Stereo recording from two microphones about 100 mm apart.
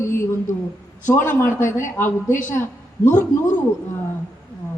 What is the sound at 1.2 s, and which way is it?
A man's voice, 20° left (ahead or behind).